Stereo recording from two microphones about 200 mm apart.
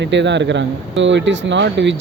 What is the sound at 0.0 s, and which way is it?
Speech, 60° right (ahead or behind).